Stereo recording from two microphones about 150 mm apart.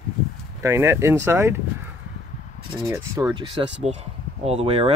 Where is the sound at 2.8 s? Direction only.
20° right (ahead or behind).